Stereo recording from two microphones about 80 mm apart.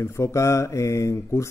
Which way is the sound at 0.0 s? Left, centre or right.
Left.